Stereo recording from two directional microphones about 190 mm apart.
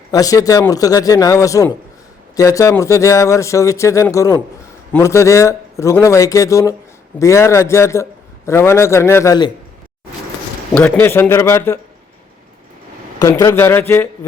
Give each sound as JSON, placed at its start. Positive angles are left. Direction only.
{"t": 0.1, "sound": "a man's voice", "side_deg": 20}
{"t": 10.8, "sound": "speech", "side_deg": 5}
{"t": 13.1, "sound": "speech", "side_deg": 15}